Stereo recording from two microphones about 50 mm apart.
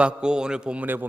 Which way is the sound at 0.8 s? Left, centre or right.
Right.